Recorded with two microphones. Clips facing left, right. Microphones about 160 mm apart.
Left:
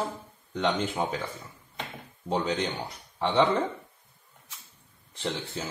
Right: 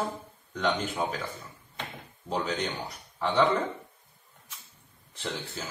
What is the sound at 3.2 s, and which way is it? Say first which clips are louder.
Speech: left 1 dB; 25° left (ahead or behind).